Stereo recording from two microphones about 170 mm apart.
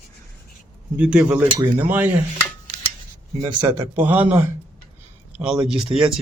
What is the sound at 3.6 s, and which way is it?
Speech, 15° right (ahead or behind).